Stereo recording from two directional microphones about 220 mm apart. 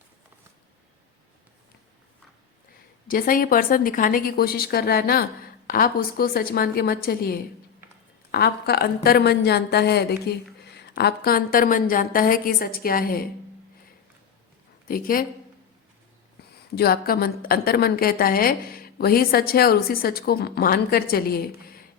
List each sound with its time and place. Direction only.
3.1 s a woman's voice: 40° left (ahead or behind)
14.8 s a woman's voice: 40° left (ahead or behind)
16.7 s a woman's voice: 45° left (ahead or behind)